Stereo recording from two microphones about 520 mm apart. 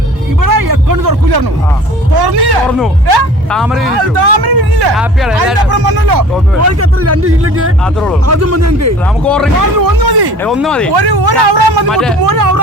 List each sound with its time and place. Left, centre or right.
0.4 s a sound: right
2.1 s speech: right
3.5 s speech: centre
3.8 s speech: right
4.9 s speech: centre
5.7 s speech: right
6.6 s speech: right
9.2 s speech: centre
9.6 s speech: right
10.4 s speech: centre
10.9 s speech: right